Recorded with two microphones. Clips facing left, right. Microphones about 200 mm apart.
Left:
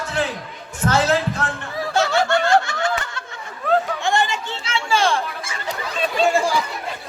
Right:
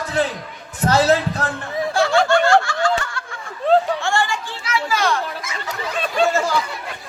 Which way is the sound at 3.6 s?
25° right (ahead or behind).